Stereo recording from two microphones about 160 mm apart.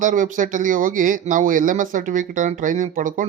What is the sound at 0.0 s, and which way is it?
Speech, 55° right (ahead or behind).